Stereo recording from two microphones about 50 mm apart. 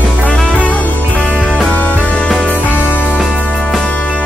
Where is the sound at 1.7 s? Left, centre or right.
Left.